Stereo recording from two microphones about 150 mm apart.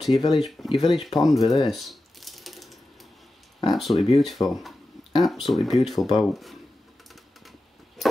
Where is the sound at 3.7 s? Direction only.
Centre (ahead or behind).